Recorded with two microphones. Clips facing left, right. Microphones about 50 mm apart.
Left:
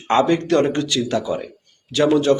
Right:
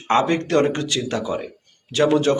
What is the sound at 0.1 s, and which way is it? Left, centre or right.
A man's voice, right.